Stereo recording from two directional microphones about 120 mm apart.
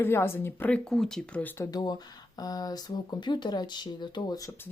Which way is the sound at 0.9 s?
5° left (ahead or behind).